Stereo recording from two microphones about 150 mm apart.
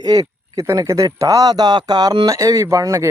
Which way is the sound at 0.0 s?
25° right (ahead or behind).